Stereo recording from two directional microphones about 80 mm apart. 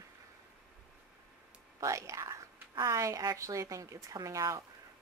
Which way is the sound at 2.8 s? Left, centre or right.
Right.